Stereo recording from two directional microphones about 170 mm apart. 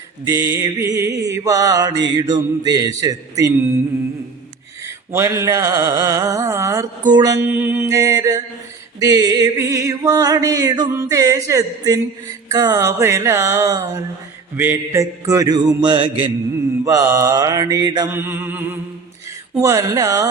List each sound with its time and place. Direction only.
0.3 s music: 20° right (ahead or behind)
4.8 s a sound: 15° right (ahead or behind)
7.1 s music: 20° right (ahead or behind)
7.4 s music: 10° right (ahead or behind); by 16.3 s 30° right (ahead or behind)
16.8 s music: 15° right (ahead or behind)
18.1 s a sound: 10° right (ahead or behind)
19.5 s music: 20° right (ahead or behind)